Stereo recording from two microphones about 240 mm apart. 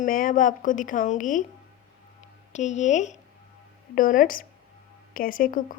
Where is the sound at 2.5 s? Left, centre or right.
Left.